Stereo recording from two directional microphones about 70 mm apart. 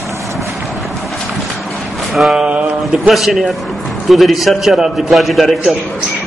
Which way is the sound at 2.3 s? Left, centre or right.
Centre.